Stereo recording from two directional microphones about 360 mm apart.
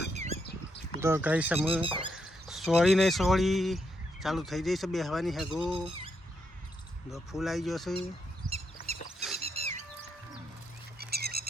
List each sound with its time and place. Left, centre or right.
0.1 s squawk: centre
0.9 s speech: centre
1.8 s speech: centre
2.1 s speech: centre
7.1 s speech: centre
8.9 s a sound: centre
10.9 s a sound: right